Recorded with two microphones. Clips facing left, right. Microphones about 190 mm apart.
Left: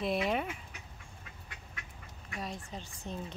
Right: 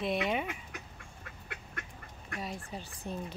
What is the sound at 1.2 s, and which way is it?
Duck, 60° right (ahead or behind).